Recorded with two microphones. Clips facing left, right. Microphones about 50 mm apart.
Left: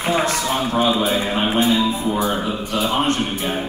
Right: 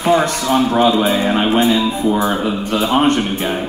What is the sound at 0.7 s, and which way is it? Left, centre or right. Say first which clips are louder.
Speech: right 3 dB; right.